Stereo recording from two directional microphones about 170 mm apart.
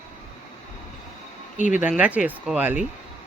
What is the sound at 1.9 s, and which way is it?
Speech, 10° right (ahead or behind).